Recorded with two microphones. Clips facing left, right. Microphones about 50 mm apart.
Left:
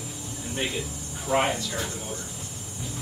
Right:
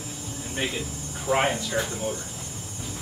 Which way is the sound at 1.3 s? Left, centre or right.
Centre.